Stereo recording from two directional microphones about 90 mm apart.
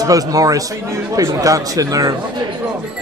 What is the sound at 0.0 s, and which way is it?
A man's voice, 40° right (ahead or behind).